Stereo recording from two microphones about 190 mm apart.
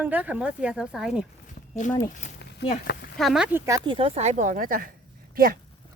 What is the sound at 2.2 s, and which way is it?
Speech, 40° left (ahead or behind).